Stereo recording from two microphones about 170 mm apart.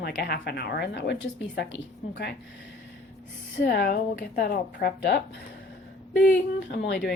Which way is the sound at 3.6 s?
75° left (ahead or behind).